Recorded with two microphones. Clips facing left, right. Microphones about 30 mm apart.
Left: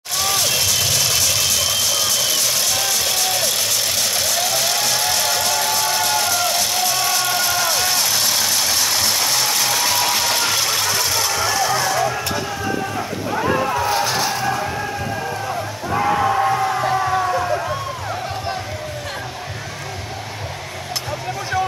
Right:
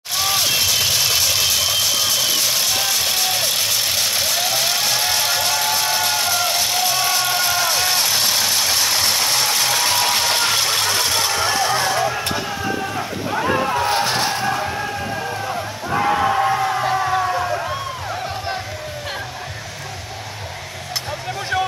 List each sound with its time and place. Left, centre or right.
0.1 s vehicle: centre
13.3 s music: right
13.7 s music: right
15.9 s music: centre